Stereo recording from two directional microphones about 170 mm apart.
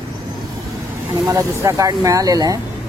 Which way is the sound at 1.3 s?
20° right (ahead or behind).